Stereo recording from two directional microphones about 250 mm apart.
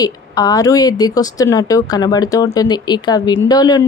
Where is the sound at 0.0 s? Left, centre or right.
Centre.